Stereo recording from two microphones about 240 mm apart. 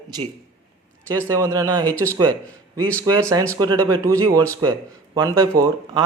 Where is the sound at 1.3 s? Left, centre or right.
Centre.